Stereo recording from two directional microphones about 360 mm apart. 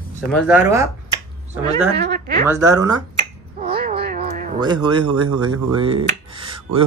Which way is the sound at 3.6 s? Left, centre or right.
Centre.